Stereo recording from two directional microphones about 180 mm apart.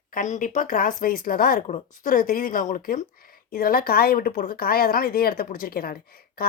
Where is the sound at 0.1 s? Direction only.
45° left (ahead or behind).